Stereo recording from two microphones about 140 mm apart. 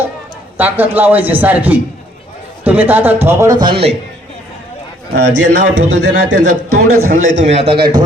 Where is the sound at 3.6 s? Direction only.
40° right (ahead or behind).